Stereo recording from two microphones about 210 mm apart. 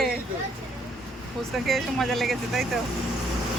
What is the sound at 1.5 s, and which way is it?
Speech, centre (ahead or behind).